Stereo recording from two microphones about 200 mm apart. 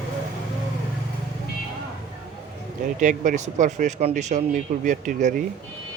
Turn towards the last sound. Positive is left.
turn(degrees=-40)  # may be behind; listen again after turning